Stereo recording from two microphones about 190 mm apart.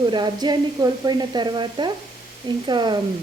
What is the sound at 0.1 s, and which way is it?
A woman's voice, 20° right (ahead or behind).